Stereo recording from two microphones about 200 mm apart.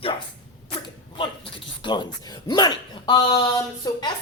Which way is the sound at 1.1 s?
25° left (ahead or behind).